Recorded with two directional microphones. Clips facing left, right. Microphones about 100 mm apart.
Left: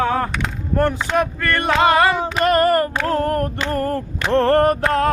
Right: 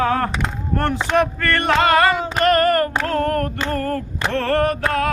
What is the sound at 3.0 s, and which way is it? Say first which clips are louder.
Speech: left 1 dB; 10° left (ahead or behind).